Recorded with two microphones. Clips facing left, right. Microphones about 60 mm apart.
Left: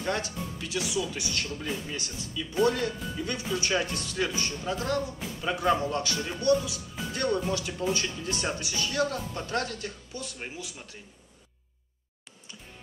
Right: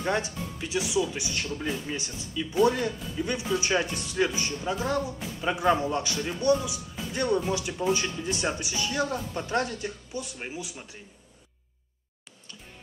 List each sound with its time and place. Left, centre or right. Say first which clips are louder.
0.0 s speech: right 2 dB; right